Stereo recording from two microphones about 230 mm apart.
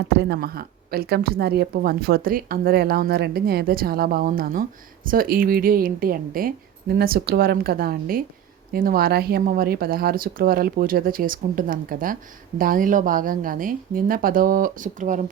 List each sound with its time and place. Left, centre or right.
0.2 s a woman's voice: right